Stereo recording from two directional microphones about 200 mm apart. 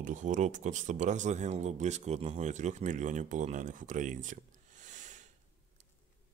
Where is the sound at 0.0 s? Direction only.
40° right (ahead or behind).